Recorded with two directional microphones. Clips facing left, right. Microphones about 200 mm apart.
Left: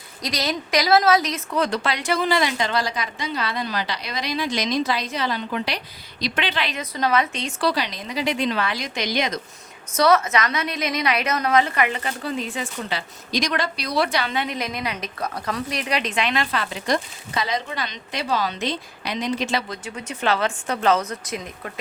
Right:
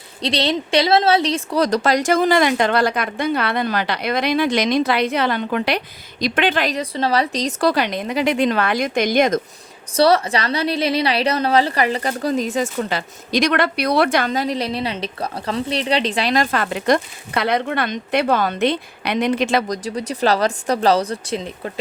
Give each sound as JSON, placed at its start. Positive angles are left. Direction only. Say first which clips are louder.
{"t": 0.2, "sound": "a woman's voice", "louder": "right 6 dB", "side_deg": -30}
{"t": 9.9, "sound": "a woman's voice", "louder": "right 3 dB", "side_deg": -30}